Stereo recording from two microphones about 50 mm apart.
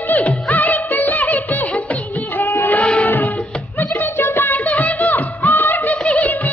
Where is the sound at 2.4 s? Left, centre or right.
Left.